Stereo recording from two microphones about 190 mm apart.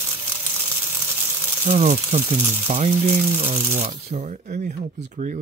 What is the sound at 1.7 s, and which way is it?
Speech, 35° right (ahead or behind).